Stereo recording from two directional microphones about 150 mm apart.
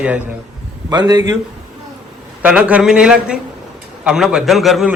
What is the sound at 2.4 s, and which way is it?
A man's voice, 10° right (ahead or behind).